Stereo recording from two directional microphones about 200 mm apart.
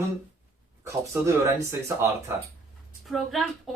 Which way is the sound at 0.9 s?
15° right (ahead or behind).